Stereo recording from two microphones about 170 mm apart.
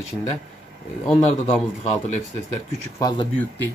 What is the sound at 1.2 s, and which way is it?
Speech, 40° left (ahead or behind).